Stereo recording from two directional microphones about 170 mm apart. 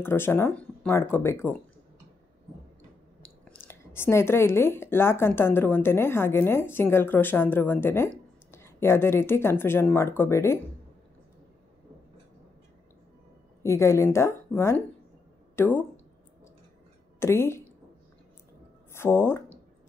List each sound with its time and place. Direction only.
0.0 s speech: 15° left (ahead or behind)
3.2 s speech: 10° left (ahead or behind)
13.6 s speech: 15° left (ahead or behind)
17.2 s speech: 15° left (ahead or behind)
18.9 s speech: 15° left (ahead or behind)